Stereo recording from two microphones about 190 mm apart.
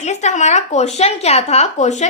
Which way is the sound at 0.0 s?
40° left (ahead or behind).